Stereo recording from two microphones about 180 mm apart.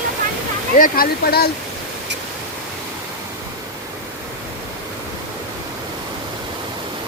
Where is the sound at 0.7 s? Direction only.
50° left (ahead or behind).